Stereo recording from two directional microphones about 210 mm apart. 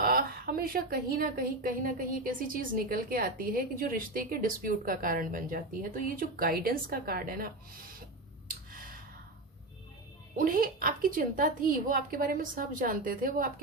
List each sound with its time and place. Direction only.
0.0 s a woman's voice: 45° right (ahead or behind)
8.4 s a sound: 45° right (ahead or behind)
10.3 s a woman's voice: 40° right (ahead or behind)